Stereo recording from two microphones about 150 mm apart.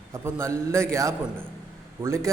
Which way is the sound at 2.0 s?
20° right (ahead or behind).